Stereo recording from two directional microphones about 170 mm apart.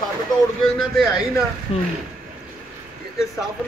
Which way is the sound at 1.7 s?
35° left (ahead or behind).